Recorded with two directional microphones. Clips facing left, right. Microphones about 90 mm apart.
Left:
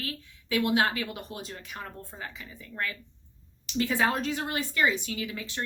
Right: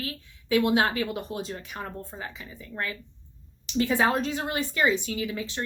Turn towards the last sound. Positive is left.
turn(degrees=-25)  # may be behind; listen again after turning